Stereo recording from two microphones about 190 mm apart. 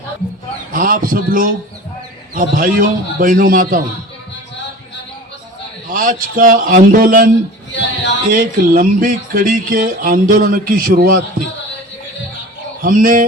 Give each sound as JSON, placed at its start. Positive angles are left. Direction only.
{"t": 0.7, "sound": "speech", "side_deg": -45}
{"t": 5.9, "sound": "speech", "side_deg": -45}
{"t": 8.3, "sound": "speech", "side_deg": -45}
{"t": 12.8, "sound": "speech", "side_deg": -45}